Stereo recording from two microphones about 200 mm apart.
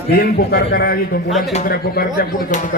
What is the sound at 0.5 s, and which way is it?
Speech, 50° left (ahead or behind).